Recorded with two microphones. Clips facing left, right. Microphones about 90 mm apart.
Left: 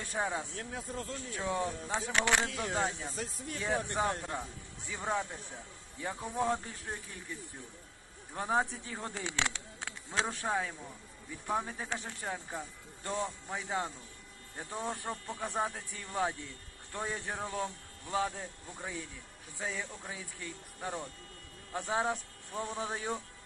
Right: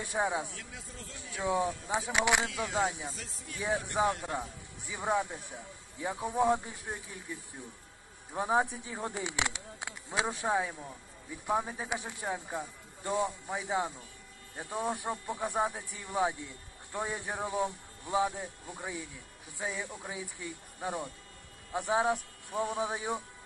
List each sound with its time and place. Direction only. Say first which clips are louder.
0.0 s speech: right 3 dB; 15° right (ahead or behind)
0.6 s speech: left 7 dB; 45° left (ahead or behind)
1.3 s speech: right 4 dB; 15° right (ahead or behind)